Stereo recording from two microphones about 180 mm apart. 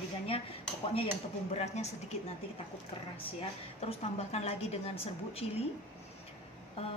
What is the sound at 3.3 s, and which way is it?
A woman's voice, 35° left (ahead or behind).